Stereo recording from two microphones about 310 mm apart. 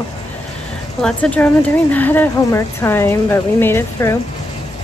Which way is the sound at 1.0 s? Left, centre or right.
Centre.